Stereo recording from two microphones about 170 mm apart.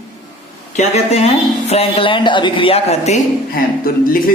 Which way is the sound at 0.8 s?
35° left (ahead or behind).